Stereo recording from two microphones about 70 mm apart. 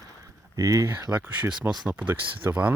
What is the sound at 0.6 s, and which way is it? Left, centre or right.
Speech, right.